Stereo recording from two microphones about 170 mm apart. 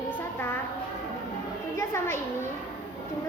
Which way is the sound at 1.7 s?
15° left (ahead or behind).